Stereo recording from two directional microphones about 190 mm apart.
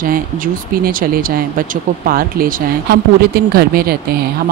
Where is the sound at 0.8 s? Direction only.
50° right (ahead or behind).